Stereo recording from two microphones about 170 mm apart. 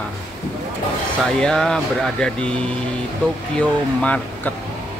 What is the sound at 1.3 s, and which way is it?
Speech, 5° left (ahead or behind).